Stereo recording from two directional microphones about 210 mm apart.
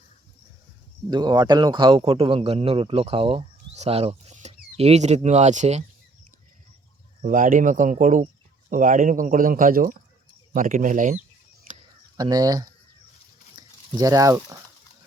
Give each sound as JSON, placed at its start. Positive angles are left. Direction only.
{"t": 1.1, "sound": "a man's voice", "side_deg": -20}
{"t": 7.2, "sound": "speech", "side_deg": -40}
{"t": 12.1, "sound": "a man's voice", "side_deg": -20}